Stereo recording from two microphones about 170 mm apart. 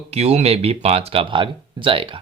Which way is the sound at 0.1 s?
40° right (ahead or behind).